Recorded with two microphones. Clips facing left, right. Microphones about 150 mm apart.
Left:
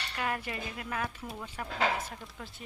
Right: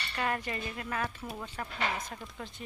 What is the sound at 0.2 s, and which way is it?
Speech, 5° left (ahead or behind).